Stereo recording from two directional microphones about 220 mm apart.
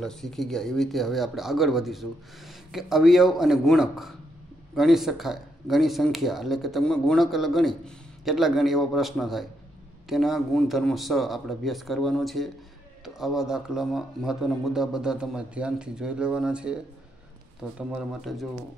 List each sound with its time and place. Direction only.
0.0 s speech: centre (ahead or behind)